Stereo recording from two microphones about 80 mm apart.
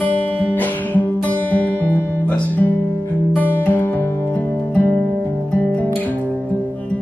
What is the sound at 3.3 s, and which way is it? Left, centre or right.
Music, left.